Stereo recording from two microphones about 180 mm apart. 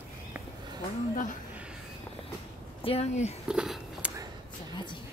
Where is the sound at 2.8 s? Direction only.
35° left (ahead or behind).